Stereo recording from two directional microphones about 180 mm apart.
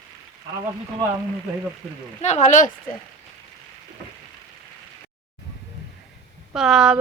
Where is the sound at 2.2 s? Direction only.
40° left (ahead or behind).